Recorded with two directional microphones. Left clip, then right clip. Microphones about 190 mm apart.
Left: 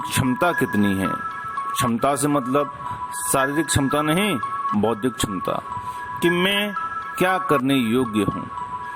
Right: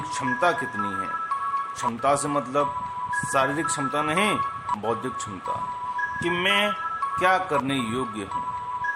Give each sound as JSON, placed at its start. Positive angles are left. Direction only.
{"t": 0.3, "sound": "speech", "side_deg": 40}